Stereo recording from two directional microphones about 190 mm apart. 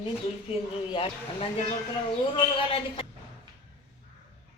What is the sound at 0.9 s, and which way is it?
Speech, 30° left (ahead or behind).